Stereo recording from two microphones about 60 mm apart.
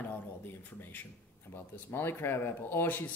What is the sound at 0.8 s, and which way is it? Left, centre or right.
Speech, left.